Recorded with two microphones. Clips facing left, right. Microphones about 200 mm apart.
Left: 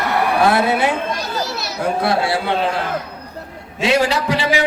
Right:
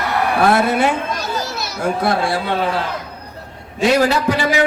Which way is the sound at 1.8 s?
50° right (ahead or behind).